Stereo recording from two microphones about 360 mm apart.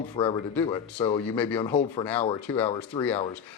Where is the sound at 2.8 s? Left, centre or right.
Centre.